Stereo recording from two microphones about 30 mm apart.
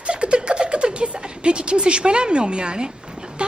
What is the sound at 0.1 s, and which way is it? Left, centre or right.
A woman's voice, right.